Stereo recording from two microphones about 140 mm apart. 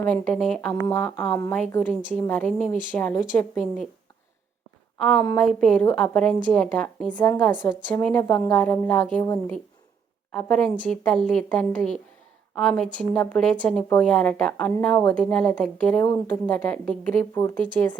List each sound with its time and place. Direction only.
0.0 s a woman's voice: 5° left (ahead or behind)
3.6 s a woman's voice: 65° left (ahead or behind)
4.9 s a woman's voice: centre (ahead or behind)
10.3 s a woman's voice: 5° left (ahead or behind)